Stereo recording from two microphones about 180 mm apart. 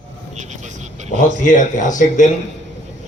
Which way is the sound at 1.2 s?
45° left (ahead or behind).